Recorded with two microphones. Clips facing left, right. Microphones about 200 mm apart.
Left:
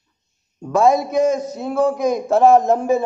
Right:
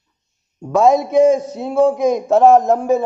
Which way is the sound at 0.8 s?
25° right (ahead or behind).